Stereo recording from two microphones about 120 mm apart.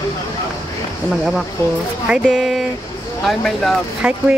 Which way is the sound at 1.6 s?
20° left (ahead or behind).